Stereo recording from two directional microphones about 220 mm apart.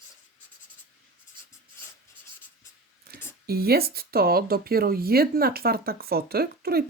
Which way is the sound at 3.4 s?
45° right (ahead or behind).